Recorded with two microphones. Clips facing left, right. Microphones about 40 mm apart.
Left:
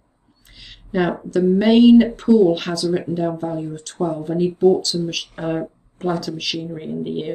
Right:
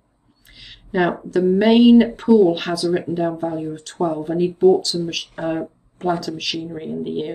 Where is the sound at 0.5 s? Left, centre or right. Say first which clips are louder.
Right 1 dB; centre.